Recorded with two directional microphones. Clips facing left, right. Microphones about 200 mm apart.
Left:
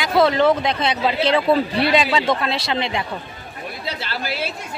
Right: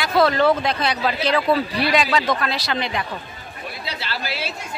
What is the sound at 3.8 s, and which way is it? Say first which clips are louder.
Chatter: left 2 dB; 50° left (ahead or behind).